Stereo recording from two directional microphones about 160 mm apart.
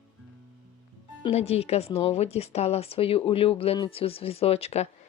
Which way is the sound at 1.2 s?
40° left (ahead or behind).